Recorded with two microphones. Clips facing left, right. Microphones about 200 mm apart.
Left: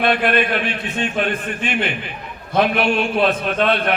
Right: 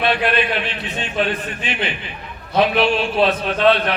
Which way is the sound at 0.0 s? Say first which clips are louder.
Left 1 dB; 50° left (ahead or behind).